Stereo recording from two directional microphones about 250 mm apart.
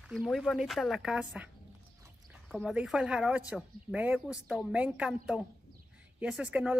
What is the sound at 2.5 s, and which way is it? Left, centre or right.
Speech, centre.